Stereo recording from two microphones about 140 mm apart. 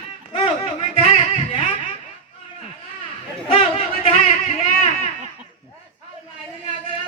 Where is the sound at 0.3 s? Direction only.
45° left (ahead or behind).